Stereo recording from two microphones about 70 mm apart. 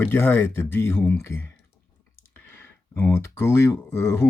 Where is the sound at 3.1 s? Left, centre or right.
Left.